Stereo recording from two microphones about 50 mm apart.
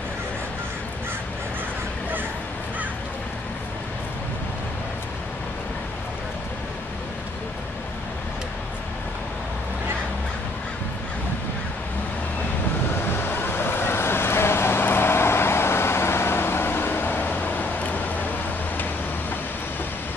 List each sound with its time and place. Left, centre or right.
13.1 s vehicle: left